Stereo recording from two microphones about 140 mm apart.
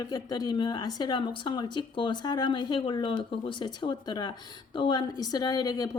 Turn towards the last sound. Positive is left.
turn(degrees=25)  # may be behind; listen again after turning